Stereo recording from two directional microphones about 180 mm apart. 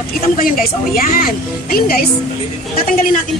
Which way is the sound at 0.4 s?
50° left (ahead or behind).